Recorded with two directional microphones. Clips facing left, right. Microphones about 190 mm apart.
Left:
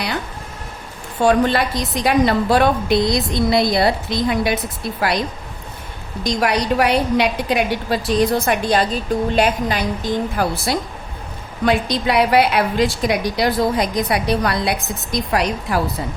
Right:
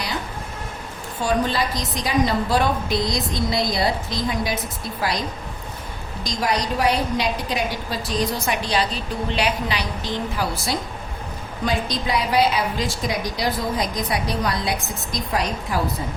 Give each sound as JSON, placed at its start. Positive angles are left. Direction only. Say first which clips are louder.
{"t": 1.2, "sound": "a woman's voice", "louder": "left 6 dB", "side_deg": 65}
{"t": 6.2, "sound": "a woman's voice", "louder": "left 5 dB", "side_deg": 65}
{"t": 11.6, "sound": "a woman's voice", "louder": "left 6 dB", "side_deg": 65}